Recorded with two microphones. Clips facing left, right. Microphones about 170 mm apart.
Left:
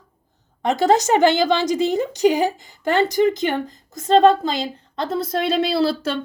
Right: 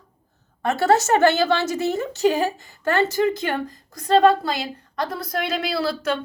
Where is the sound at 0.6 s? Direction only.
15° left (ahead or behind).